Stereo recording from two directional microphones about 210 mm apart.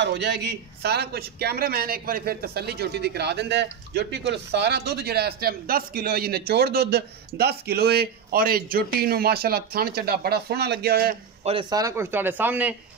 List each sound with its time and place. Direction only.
0.0 s a man's voice: 55° right (ahead or behind)
11.4 s a man's voice: 20° right (ahead or behind)